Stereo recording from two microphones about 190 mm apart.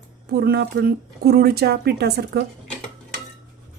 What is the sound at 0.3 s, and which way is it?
Speech, 55° right (ahead or behind).